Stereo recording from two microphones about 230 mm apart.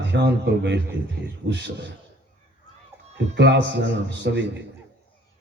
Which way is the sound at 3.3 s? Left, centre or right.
Right.